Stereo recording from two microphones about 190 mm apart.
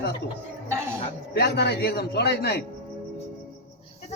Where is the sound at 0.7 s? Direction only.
10° right (ahead or behind).